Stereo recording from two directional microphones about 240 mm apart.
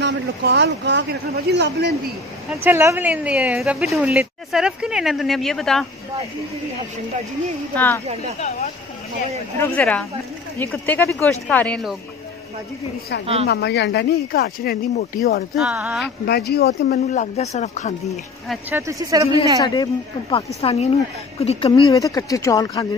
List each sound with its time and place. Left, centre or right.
0.0 s speech: right
2.5 s speech: centre
7.7 s speech: centre
9.6 s speech: centre
13.2 s a woman's voice: right
13.5 s speech: left
15.5 s speech: centre
16.3 s speech: left
18.1 s speech: centre
18.8 s speech: centre
19.6 s speech: centre